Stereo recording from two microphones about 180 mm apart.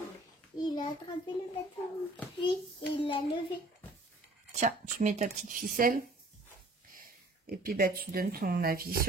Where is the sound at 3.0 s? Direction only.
25° left (ahead or behind).